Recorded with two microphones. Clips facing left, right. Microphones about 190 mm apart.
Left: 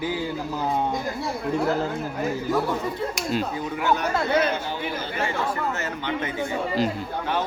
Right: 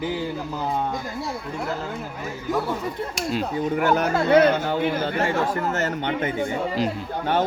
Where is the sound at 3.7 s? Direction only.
50° right (ahead or behind).